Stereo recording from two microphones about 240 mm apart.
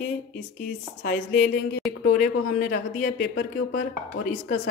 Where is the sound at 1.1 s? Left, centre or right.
Left.